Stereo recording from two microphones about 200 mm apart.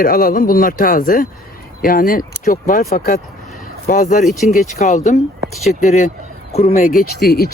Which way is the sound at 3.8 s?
40° left (ahead or behind).